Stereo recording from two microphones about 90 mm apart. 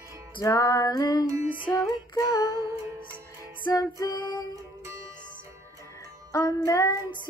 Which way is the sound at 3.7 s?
40° left (ahead or behind).